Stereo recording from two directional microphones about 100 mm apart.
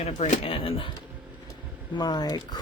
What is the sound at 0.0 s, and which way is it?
Speech, 70° left (ahead or behind).